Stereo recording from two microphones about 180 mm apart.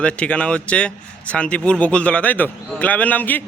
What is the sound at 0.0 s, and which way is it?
A man's voice, 5° left (ahead or behind).